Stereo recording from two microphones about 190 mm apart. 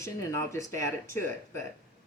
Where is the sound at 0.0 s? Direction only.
15° left (ahead or behind).